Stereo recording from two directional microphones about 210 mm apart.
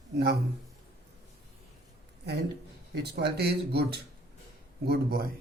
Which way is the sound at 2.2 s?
50° right (ahead or behind).